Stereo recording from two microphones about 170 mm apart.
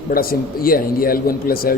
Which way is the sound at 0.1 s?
60° left (ahead or behind).